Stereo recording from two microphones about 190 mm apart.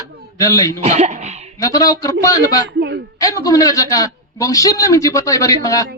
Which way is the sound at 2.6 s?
60° right (ahead or behind).